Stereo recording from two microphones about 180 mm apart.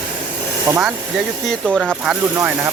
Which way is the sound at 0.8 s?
Centre (ahead or behind).